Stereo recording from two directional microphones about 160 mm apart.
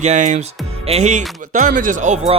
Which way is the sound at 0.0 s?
45° right (ahead or behind).